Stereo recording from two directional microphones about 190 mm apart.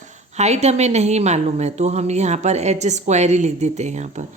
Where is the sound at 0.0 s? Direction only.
35° right (ahead or behind).